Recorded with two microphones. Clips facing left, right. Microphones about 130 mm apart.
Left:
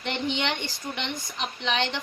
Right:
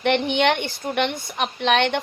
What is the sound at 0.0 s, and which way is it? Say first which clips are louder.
A woman's voice: right 9 dB; 65° right (ahead or behind).